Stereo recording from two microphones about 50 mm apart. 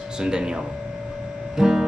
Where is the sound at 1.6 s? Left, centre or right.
Centre.